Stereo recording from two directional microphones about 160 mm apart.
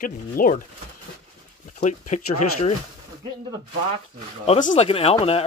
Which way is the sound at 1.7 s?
50° left (ahead or behind).